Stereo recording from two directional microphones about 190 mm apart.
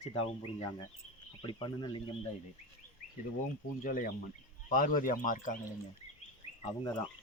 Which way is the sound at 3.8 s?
45° left (ahead or behind).